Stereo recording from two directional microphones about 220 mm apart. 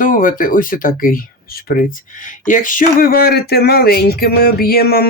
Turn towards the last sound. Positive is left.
turn(degrees=45)  # may be behind; listen again after turning